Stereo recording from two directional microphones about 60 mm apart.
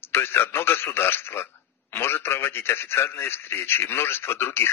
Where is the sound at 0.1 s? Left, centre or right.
Left.